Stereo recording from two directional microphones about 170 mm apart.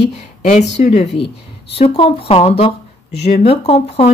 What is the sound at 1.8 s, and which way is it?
Speech, 35° left (ahead or behind).